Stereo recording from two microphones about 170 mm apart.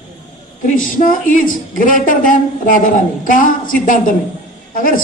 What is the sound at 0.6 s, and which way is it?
Speech, 50° left (ahead or behind).